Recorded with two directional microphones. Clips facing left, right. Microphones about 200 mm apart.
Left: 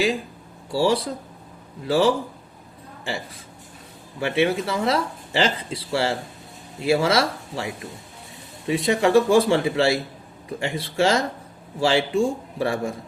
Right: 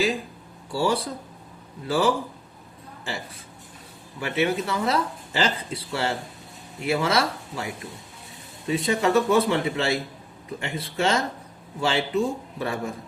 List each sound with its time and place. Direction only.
0.7 s speech: 25° left (ahead or behind)
4.2 s speech: 30° left (ahead or behind)
8.6 s speech: 25° left (ahead or behind)